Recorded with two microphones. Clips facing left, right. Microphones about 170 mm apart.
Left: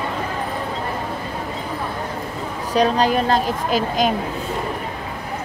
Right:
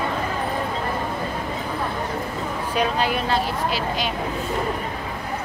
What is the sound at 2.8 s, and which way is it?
Speech, 40° left (ahead or behind).